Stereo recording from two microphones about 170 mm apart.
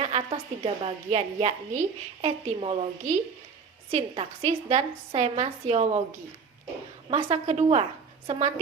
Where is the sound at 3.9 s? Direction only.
40° right (ahead or behind).